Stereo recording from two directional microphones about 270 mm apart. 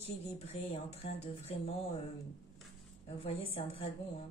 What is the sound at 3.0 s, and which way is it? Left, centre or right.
Speech, left.